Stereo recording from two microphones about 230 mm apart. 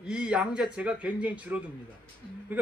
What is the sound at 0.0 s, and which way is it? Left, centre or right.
A man's voice, centre.